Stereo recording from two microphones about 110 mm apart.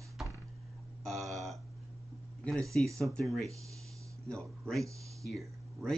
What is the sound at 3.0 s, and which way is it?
A man's voice, centre (ahead or behind).